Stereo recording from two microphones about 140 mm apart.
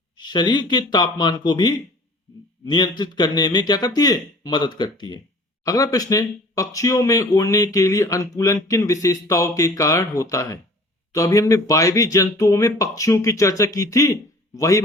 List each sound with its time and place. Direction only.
0.2 s speech: 30° left (ahead or behind)